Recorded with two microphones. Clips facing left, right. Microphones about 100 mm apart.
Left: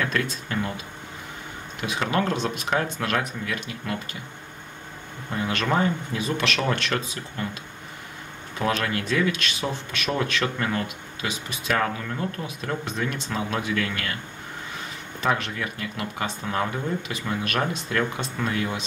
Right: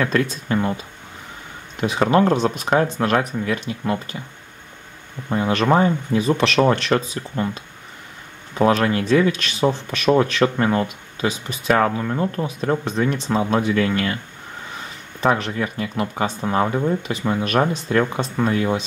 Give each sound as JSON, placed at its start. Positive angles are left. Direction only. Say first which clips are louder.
{"t": 0.0, "sound": "speech", "louder": "right 6 dB", "side_deg": -30}
{"t": 1.8, "sound": "speech", "louder": "right 8 dB", "side_deg": -35}
{"t": 5.3, "sound": "speech", "louder": "right 7 dB", "side_deg": -30}
{"t": 8.5, "sound": "speech", "louder": "right 8 dB", "side_deg": -30}
{"t": 15.1, "sound": "speech", "louder": "right 6 dB", "side_deg": -35}